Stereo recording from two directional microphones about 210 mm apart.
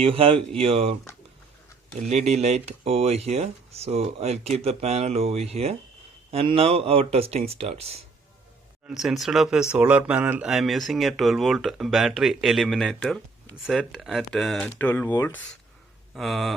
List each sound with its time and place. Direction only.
0.0 s speech: 25° right (ahead or behind)
2.0 s speech: 35° right (ahead or behind)
8.9 s speech: centre (ahead or behind)